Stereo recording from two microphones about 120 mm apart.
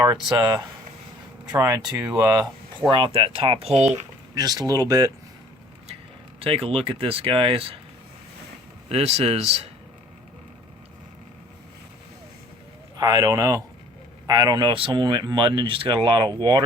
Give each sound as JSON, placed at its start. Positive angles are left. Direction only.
{"t": 0.3, "sound": "speech", "side_deg": -30}
{"t": 2.9, "sound": "speech", "side_deg": -45}
{"t": 4.4, "sound": "speech", "side_deg": -30}
{"t": 6.4, "sound": "speech", "side_deg": -50}
{"t": 8.9, "sound": "speech", "side_deg": -60}
{"t": 13.0, "sound": "speech", "side_deg": -35}